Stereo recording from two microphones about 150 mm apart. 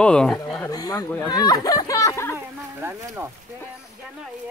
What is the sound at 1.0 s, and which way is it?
Speech, 15° left (ahead or behind).